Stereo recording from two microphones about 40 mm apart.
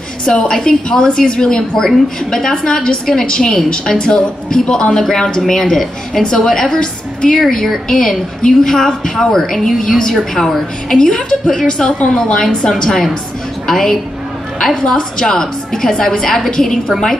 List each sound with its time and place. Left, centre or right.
0.2 s a woman's voice: centre